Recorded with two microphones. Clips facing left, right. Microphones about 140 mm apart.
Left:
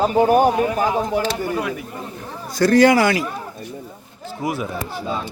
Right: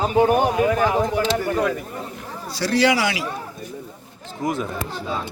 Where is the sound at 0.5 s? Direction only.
30° left (ahead or behind).